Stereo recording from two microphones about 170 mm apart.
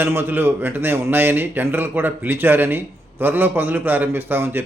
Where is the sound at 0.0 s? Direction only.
10° right (ahead or behind).